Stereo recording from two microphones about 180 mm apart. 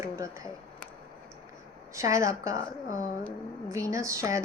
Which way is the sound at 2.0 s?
15° right (ahead or behind).